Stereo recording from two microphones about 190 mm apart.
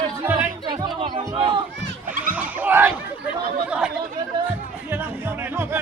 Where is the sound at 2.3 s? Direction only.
10° right (ahead or behind).